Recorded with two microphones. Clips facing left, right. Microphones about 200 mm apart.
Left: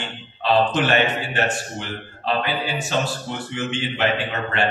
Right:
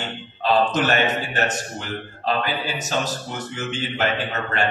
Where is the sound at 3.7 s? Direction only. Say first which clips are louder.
Left 1 dB; 40° right (ahead or behind).